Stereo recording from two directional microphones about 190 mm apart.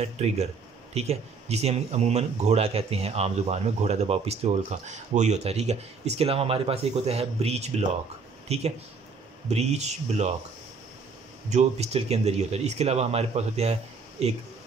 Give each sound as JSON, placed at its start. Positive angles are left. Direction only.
{"t": 0.0, "sound": "speech", "side_deg": -35}
{"t": 11.5, "sound": "speech", "side_deg": -35}